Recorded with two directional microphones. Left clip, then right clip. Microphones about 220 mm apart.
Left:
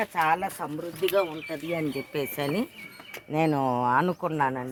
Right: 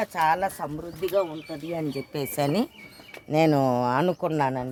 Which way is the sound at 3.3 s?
50° right (ahead or behind).